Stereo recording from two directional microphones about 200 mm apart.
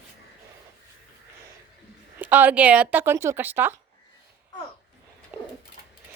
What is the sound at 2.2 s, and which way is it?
Speech, 10° right (ahead or behind).